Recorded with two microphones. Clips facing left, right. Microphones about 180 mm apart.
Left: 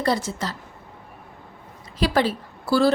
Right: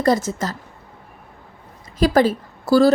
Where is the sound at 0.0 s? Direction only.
45° right (ahead or behind).